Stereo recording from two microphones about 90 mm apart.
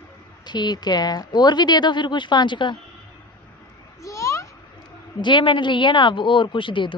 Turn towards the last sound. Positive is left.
turn(degrees=65)  # may be behind; listen again after turning